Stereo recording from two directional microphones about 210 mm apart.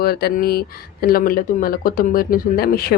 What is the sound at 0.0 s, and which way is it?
A woman's voice, 45° left (ahead or behind).